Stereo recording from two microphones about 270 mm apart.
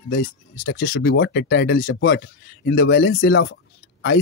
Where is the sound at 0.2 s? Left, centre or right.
Left.